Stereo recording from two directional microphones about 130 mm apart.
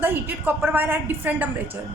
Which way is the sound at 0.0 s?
15° right (ahead or behind).